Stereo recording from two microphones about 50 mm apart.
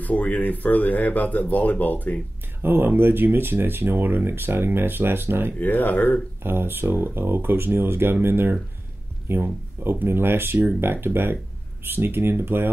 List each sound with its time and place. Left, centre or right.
0.0 s speech: left
2.6 s speech: right
5.6 s speech: left
6.4 s speech: right
10.0 s speech: right